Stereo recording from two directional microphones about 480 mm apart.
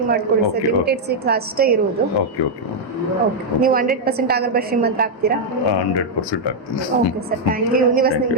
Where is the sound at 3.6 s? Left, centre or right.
Centre.